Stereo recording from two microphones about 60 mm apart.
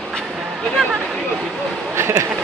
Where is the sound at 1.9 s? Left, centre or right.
Right.